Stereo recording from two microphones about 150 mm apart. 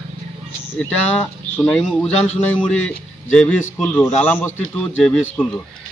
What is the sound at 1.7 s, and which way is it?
Speech, 5° left (ahead or behind).